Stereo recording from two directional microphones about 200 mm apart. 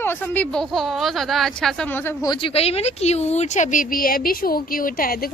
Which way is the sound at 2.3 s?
30° left (ahead or behind).